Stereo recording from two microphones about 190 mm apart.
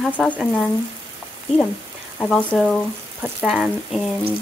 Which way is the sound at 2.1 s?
Centre (ahead or behind).